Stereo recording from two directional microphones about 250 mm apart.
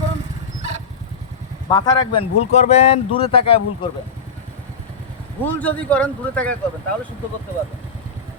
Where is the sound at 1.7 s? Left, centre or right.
Centre.